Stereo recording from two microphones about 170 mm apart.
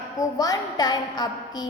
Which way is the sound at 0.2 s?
20° left (ahead or behind).